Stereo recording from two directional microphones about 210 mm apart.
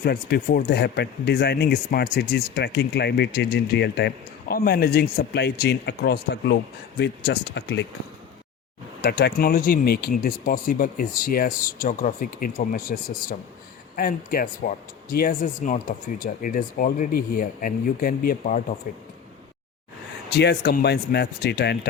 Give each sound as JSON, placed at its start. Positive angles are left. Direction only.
{"t": 0.0, "sound": "speech", "side_deg": 45}
{"t": 9.0, "sound": "speech", "side_deg": 45}
{"t": 20.3, "sound": "speech", "side_deg": 50}